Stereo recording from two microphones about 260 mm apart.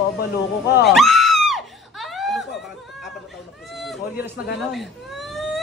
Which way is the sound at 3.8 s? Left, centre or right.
Centre.